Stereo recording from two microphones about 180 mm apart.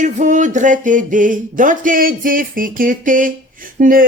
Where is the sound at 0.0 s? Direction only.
45° right (ahead or behind).